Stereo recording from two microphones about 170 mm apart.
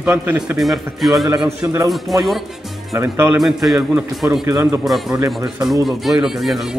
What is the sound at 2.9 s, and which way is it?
Speech, 15° right (ahead or behind).